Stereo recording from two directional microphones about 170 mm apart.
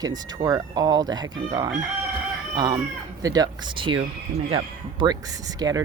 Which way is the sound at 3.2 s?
20° right (ahead or behind).